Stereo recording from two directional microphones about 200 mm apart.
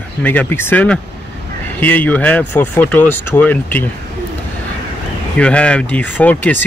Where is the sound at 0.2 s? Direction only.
10° left (ahead or behind).